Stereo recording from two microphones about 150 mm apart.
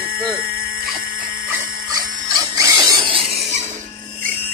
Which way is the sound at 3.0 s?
40° right (ahead or behind).